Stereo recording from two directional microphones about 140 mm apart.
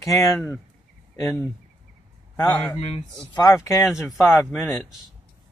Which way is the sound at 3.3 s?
25° left (ahead or behind).